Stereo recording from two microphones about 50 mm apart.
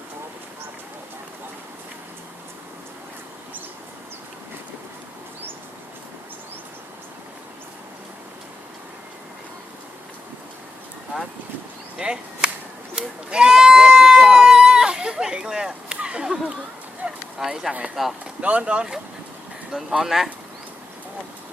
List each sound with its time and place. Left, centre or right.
11.9 s chop: centre
13.0 s a sound: centre
17.3 s speech: centre
18.4 s speech: right
20.0 s speech: centre